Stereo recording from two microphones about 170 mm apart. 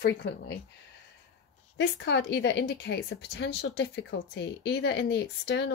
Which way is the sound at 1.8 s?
85° left.